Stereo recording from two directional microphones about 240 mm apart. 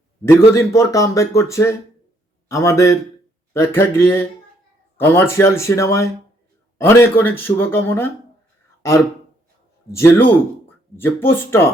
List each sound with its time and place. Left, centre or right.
0.3 s speech: centre
9.9 s speech: centre